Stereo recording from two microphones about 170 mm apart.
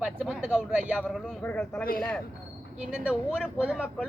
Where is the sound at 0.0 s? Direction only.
5° right (ahead or behind).